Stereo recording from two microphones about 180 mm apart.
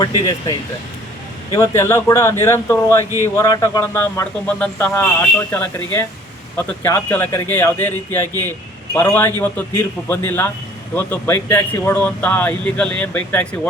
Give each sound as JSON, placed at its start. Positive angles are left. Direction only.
{"t": 0.0, "sound": "a man's voice", "side_deg": 20}